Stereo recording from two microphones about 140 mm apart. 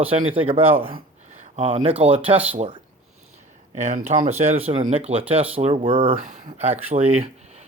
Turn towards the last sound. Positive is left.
turn(degrees=-50)  # may be behind; listen again after turning